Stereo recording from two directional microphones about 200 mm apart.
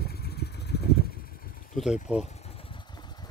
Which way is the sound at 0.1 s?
50° left (ahead or behind).